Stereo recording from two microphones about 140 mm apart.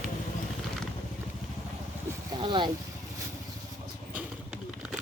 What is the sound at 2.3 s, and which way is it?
Speech, 35° right (ahead or behind).